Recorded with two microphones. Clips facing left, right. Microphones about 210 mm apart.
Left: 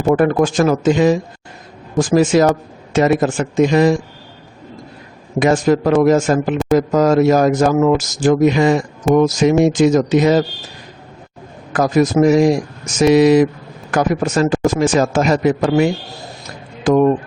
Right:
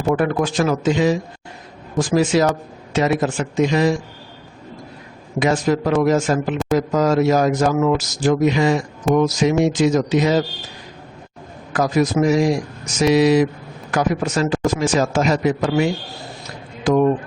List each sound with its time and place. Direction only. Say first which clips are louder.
0.1 s a man's voice: left 5 dB; 45° left (ahead or behind)
5.4 s a man's voice: left 4 dB; 50° left (ahead or behind)
11.7 s a man's voice: left 4 dB; 50° left (ahead or behind)